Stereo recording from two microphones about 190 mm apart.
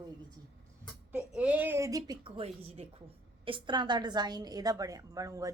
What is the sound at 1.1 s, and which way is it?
A woman's voice, 5° right (ahead or behind).